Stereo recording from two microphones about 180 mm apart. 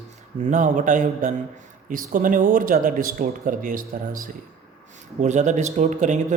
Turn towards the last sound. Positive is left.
turn(degrees=-40)  # may be behind; listen again after turning